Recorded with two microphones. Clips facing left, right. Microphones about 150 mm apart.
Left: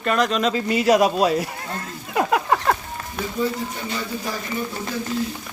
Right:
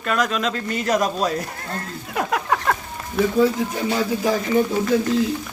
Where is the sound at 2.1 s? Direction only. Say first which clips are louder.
Left 2 dB; 5° left (ahead or behind).